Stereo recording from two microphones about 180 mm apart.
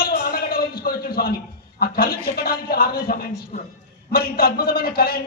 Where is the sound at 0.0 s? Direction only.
55° left (ahead or behind).